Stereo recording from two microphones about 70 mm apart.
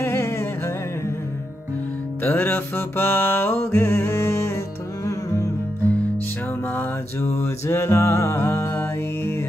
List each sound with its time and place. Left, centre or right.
0.0 s humming: left
2.2 s music: left
6.7 s music: left